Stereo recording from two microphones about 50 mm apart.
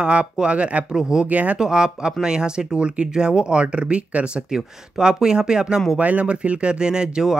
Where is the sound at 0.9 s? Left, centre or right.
Centre.